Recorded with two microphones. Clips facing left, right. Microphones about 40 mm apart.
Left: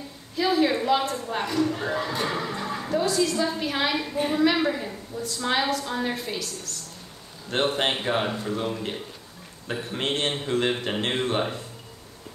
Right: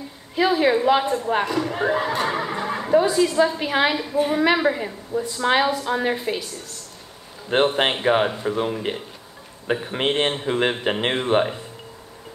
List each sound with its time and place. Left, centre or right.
0.4 s speech: right